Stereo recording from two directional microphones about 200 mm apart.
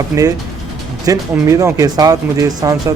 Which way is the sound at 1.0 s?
15° right (ahead or behind).